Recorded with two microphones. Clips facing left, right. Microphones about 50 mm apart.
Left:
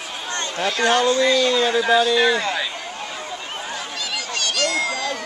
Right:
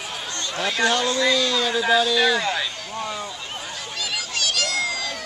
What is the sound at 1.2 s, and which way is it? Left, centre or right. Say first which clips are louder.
Speech: left 3 dB; centre.